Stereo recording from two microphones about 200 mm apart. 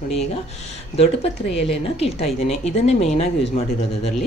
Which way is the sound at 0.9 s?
30° left (ahead or behind).